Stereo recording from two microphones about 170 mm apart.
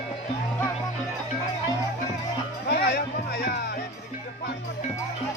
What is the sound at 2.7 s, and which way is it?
Music, 70° left (ahead or behind).